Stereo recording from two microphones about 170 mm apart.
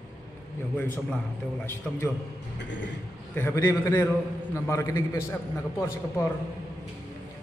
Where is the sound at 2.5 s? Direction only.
90° left.